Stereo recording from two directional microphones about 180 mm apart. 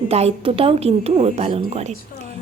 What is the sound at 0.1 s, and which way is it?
Speech, 35° right (ahead or behind).